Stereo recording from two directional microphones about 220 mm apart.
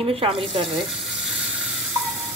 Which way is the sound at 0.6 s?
Centre (ahead or behind).